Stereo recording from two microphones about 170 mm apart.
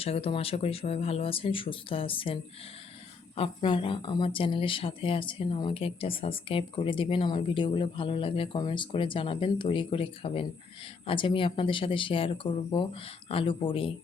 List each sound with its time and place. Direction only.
0.0 s speech: 35° left (ahead or behind)